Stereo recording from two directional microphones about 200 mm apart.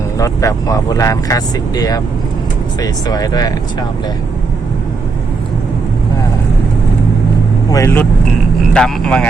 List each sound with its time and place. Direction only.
0.2 s speech: 15° left (ahead or behind)
7.7 s speech: 15° left (ahead or behind)